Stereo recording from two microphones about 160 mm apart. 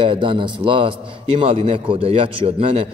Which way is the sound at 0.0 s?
30° right (ahead or behind).